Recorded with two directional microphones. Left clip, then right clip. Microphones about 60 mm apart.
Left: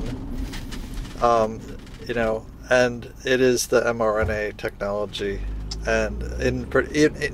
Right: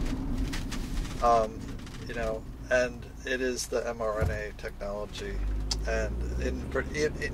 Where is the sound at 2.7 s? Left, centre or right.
Left.